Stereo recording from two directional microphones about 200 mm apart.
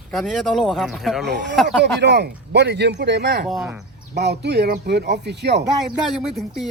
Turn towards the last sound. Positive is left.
turn(degrees=0)  # may be behind; listen again after turning